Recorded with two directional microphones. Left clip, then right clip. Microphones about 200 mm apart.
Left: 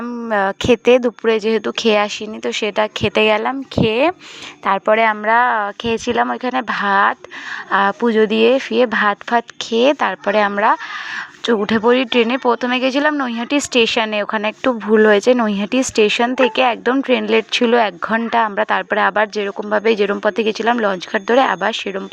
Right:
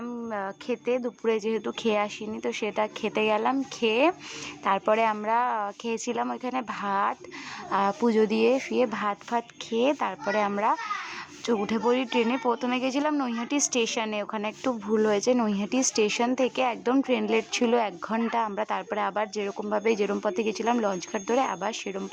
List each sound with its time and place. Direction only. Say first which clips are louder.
0.0 s a woman's voice: left 14 dB; 30° left (ahead or behind)
1.2 s speech: left 11 dB; 20° left (ahead or behind)